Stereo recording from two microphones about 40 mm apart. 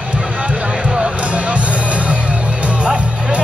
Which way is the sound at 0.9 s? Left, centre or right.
Right.